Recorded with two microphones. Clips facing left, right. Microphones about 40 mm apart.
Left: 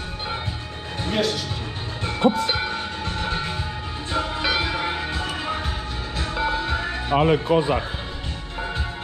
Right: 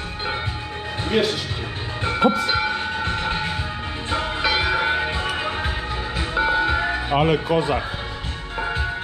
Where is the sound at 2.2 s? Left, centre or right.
Right.